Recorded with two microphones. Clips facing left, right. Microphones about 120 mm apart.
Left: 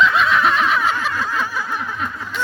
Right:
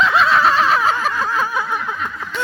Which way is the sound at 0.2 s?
35° right (ahead or behind).